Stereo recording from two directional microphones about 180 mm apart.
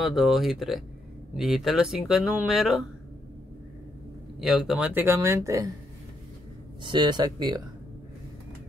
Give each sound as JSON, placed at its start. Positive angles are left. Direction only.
{"t": 0.0, "sound": "speech", "side_deg": 0}
{"t": 4.4, "sound": "speech", "side_deg": -5}
{"t": 6.8, "sound": "speech", "side_deg": -25}